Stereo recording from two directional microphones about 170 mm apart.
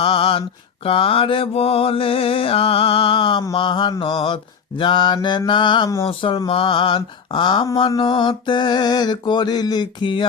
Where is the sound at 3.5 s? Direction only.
30° left (ahead or behind).